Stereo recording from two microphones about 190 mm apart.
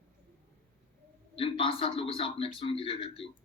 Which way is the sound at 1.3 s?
30° left (ahead or behind).